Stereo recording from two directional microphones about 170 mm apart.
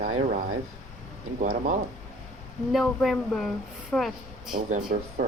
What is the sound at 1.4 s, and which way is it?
Speech, 50° right (ahead or behind).